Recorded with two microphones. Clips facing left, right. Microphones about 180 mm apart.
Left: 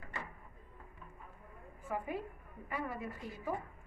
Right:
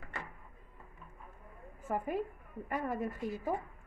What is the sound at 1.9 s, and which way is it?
A woman's voice, 45° right (ahead or behind).